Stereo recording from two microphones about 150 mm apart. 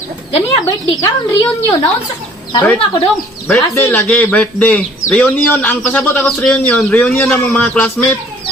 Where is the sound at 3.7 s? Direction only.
15° left (ahead or behind).